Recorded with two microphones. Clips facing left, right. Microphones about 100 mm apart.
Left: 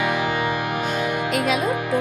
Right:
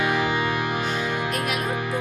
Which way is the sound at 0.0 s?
10° left (ahead or behind).